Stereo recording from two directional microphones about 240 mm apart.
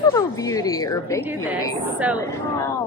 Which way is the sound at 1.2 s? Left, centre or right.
Centre.